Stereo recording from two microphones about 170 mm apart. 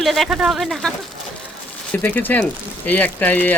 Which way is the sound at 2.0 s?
10° left (ahead or behind).